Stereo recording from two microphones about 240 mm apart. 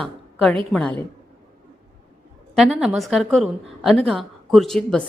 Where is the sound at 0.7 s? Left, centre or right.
Centre.